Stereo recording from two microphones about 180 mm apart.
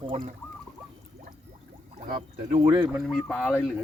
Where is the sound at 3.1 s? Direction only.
5° left (ahead or behind).